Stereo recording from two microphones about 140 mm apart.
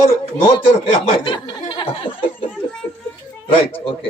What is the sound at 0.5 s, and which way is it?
Speech, 35° left (ahead or behind).